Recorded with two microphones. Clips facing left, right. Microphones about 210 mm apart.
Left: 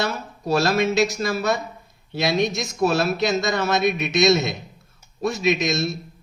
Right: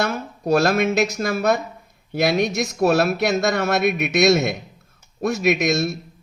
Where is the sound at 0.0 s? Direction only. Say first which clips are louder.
Right 3 dB; 50° right (ahead or behind).